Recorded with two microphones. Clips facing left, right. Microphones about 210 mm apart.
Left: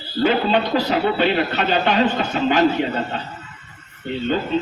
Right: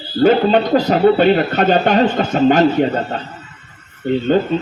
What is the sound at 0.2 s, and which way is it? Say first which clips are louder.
Speech: right 6 dB; 45° right (ahead or behind).